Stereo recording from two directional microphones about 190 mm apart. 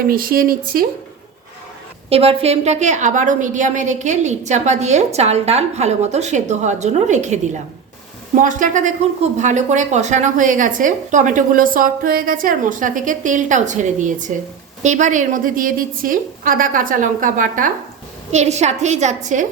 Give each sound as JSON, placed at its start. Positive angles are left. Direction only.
{"t": 0.1, "sound": "speech", "side_deg": -50}
{"t": 2.0, "sound": "a woman's voice", "side_deg": -30}
{"t": 8.4, "sound": "a woman's voice", "side_deg": -45}